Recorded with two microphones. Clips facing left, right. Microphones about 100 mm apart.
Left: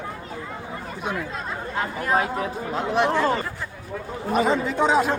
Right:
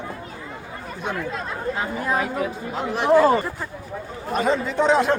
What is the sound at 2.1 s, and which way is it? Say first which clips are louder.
Speech: left 2 dB; 30° left (ahead or behind).